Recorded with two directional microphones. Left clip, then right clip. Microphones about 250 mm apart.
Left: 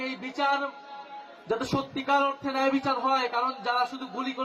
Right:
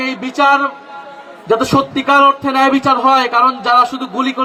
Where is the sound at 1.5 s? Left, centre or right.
Right.